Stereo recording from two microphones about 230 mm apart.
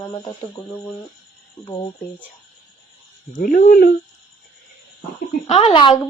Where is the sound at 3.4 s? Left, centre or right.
Left.